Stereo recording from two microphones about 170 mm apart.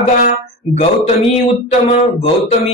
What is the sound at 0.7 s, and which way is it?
Speech, 40° left (ahead or behind).